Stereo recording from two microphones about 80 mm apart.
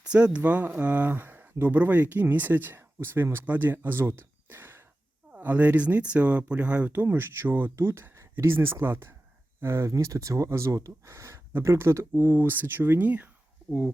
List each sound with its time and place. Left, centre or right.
0.0 s speech: centre; by 4.8 s right
5.3 s speech: right
11.0 s speech: right; by 13.3 s centre
13.7 s speech: centre